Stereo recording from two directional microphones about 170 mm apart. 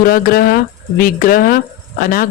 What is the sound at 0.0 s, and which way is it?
Speech, 60° left (ahead or behind).